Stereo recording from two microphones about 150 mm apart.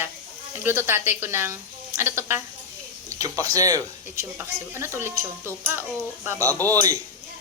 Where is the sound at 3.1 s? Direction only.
25° right (ahead or behind).